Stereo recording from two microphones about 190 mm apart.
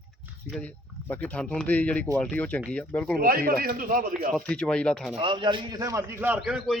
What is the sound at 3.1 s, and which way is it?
A man's voice, 50° right (ahead or behind).